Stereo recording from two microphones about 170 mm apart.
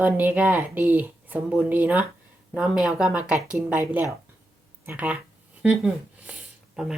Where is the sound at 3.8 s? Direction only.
15° right (ahead or behind).